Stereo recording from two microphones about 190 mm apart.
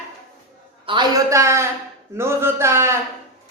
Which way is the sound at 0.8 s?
20° right (ahead or behind).